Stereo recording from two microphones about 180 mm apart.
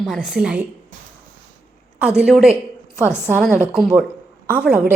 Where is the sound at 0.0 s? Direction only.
Centre (ahead or behind).